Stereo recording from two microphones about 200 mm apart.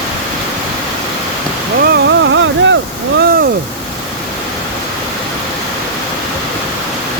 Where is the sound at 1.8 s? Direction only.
60° right (ahead or behind).